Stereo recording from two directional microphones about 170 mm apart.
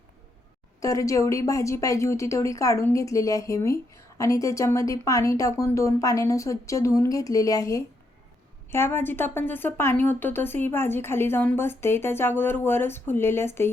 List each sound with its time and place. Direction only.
0.8 s a woman's voice: 20° left (ahead or behind)